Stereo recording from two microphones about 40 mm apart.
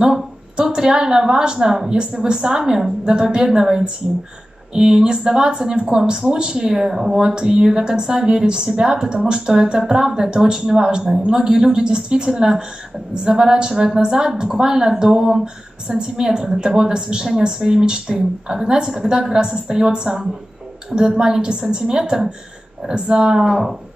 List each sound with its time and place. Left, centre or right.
0.0 s a woman's voice: centre
15.4 s a woman's voice: right
23.3 s a woman's voice: centre